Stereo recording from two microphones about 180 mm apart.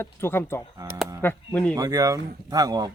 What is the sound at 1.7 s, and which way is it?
Speech, 20° right (ahead or behind).